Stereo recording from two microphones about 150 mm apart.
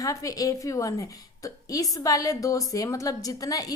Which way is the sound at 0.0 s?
20° left (ahead or behind).